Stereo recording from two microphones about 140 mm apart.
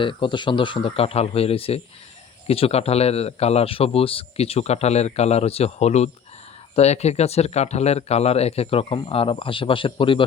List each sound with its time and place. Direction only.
0.0 s speech: 35° left (ahead or behind)